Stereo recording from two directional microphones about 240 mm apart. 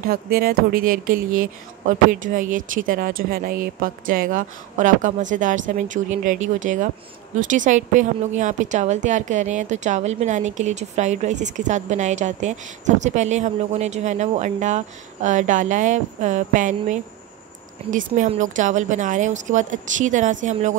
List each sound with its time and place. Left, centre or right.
0.1 s a woman's voice: right